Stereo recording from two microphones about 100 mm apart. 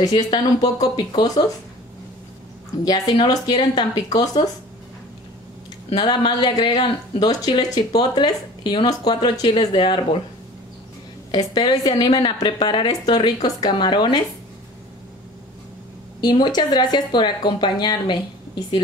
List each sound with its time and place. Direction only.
0.0 s speech: 45° left (ahead or behind)
2.8 s speech: 45° left (ahead or behind)
5.9 s speech: 50° left (ahead or behind)
11.3 s speech: 45° left (ahead or behind)
16.2 s speech: 45° left (ahead or behind)